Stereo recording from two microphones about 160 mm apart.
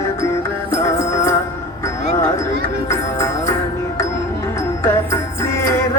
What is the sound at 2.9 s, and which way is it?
Music, 15° left (ahead or behind).